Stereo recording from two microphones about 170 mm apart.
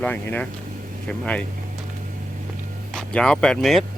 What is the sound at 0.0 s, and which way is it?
Speech, 10° left (ahead or behind).